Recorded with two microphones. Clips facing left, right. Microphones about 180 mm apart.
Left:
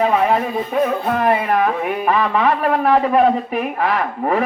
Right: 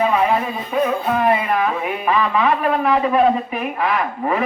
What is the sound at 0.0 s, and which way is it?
Music, 45° left (ahead or behind).